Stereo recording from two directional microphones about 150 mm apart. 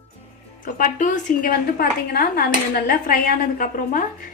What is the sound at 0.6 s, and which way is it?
A woman's voice, 60° left (ahead or behind).